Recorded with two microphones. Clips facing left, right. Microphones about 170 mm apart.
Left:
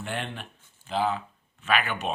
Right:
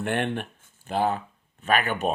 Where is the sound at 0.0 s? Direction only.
60° right (ahead or behind).